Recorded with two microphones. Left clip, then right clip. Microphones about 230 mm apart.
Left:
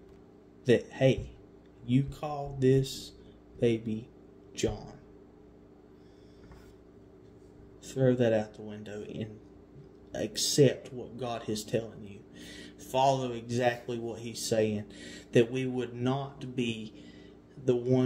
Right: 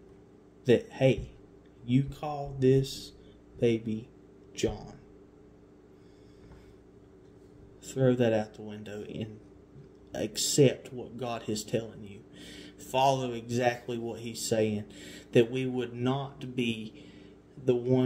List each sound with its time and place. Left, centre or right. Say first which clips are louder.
0.7 s speech: right 1 dB; centre
7.8 s speech: even; centre